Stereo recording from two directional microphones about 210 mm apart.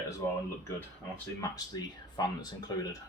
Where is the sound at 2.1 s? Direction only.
20° left (ahead or behind).